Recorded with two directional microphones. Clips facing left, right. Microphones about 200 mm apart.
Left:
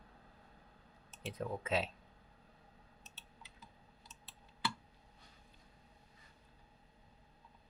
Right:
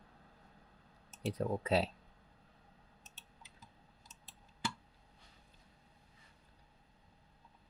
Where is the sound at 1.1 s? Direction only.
40° right (ahead or behind).